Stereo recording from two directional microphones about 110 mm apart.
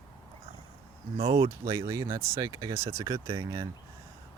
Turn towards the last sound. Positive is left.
turn(degrees=-30)  # may be behind; listen again after turning